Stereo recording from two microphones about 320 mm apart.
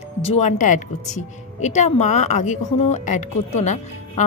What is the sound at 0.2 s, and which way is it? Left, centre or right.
Speech, centre.